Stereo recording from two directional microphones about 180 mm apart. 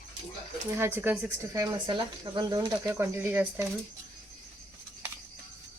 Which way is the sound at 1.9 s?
25° right (ahead or behind).